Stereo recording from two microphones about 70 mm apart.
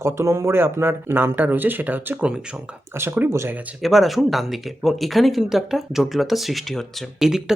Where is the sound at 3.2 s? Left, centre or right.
Right.